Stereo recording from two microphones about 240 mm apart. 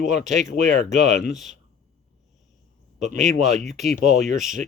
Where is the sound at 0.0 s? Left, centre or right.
Right.